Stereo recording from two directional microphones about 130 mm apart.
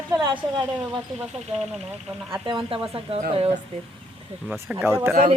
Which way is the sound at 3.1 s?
50° right (ahead or behind).